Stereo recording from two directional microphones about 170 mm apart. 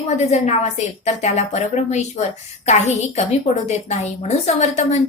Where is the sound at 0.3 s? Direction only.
40° left (ahead or behind).